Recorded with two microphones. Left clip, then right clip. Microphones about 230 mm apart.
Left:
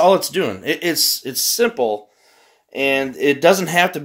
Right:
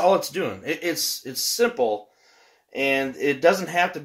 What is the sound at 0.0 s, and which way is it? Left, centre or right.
Speech, left.